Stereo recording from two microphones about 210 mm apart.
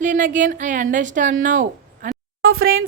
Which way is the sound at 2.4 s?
75° right (ahead or behind).